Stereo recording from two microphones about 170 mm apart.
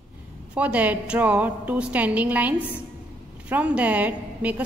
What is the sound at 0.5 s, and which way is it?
A woman's voice, 10° right (ahead or behind).